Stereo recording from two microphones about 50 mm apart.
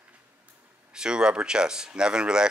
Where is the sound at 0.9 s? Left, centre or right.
Centre.